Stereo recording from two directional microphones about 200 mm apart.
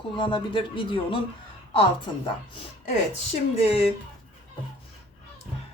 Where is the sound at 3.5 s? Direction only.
30° left (ahead or behind).